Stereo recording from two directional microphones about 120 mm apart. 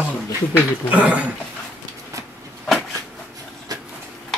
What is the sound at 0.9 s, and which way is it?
Speech, 10° right (ahead or behind).